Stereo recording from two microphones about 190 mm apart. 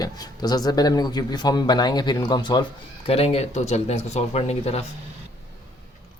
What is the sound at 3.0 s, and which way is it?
Speech, 30° left (ahead or behind).